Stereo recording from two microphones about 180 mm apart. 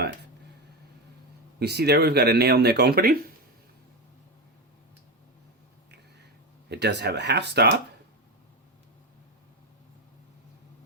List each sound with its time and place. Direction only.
1.5 s speech: 65° right (ahead or behind)
6.7 s speech: 70° right (ahead or behind)